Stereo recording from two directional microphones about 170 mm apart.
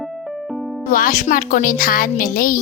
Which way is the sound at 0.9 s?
50° left (ahead or behind).